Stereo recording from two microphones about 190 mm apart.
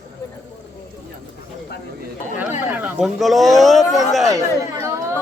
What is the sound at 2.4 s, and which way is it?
Speech, 10° right (ahead or behind).